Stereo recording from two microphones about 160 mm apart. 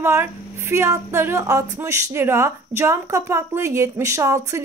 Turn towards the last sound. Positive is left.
turn(degrees=-20)  # may be behind; listen again after turning